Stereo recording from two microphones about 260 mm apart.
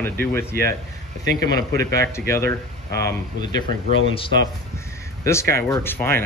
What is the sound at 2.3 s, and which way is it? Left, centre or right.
Speech, centre.